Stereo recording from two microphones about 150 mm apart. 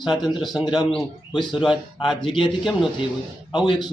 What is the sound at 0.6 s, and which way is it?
A man's voice, 25° left (ahead or behind).